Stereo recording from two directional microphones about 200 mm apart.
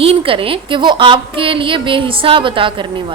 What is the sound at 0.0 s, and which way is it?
A woman's voice, 25° right (ahead or behind).